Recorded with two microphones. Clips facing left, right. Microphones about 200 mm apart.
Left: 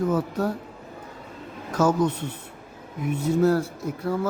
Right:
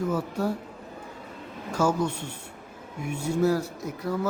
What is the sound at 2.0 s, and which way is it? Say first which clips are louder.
Speech: left 5 dB; 10° right (ahead or behind).